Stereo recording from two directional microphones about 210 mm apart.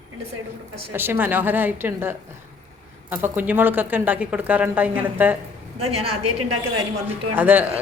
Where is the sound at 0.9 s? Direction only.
10° right (ahead or behind).